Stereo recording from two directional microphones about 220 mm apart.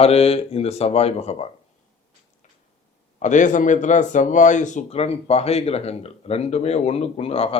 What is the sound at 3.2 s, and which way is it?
A man's voice, 35° left (ahead or behind).